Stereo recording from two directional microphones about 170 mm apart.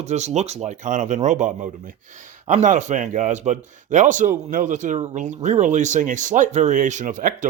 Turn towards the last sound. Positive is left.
turn(degrees=-50)  # may be behind; listen again after turning